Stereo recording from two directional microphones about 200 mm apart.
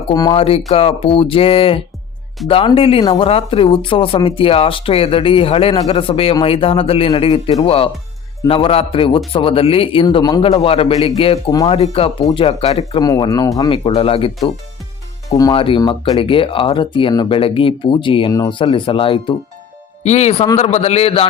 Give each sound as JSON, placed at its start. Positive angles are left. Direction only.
{"t": 0.1, "sound": "speech", "side_deg": 20}
{"t": 12.9, "sound": "a man's voice", "side_deg": 20}